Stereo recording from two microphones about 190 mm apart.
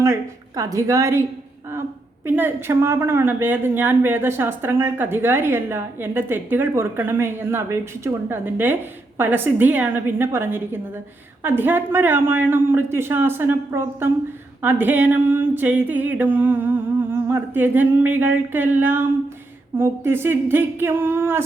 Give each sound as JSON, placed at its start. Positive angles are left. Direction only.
{"t": 0.0, "sound": "speech", "side_deg": -15}
{"t": 2.2, "sound": "a woman's voice", "side_deg": -10}